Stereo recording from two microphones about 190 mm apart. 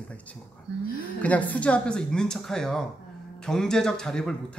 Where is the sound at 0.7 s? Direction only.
65° right (ahead or behind).